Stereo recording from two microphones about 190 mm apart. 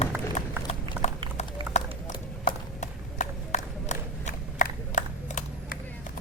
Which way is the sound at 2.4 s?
40° left (ahead or behind).